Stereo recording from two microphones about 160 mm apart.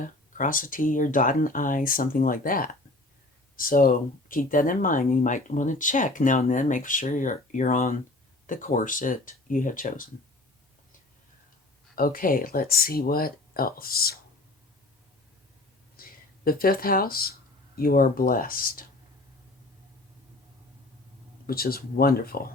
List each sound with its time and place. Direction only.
0.0 s speech: 55° left (ahead or behind)
11.9 s speech: 65° left (ahead or behind)
16.0 s speech: 65° left (ahead or behind)
21.4 s speech: 70° left (ahead or behind)